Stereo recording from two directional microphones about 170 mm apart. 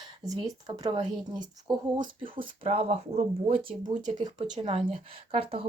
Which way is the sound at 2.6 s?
40° right (ahead or behind).